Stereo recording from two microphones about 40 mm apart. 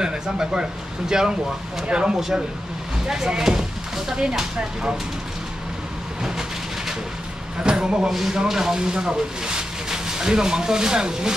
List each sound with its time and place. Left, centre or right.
0.0 s speech: centre
7.6 s speech: right
8.1 s speech: centre